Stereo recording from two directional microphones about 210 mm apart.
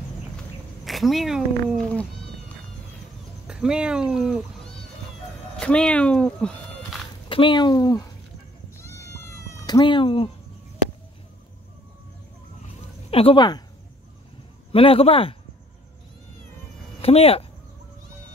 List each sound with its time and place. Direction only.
0.8 s speech: centre (ahead or behind)
3.4 s speech: 5° right (ahead or behind)
5.6 s speech: 5° left (ahead or behind)
7.2 s speech: 25° left (ahead or behind)
8.7 s cat: 10° left (ahead or behind)
13.1 s speech: 25° left (ahead or behind)
14.7 s speech: 25° left (ahead or behind)
17.0 s speech: 30° left (ahead or behind)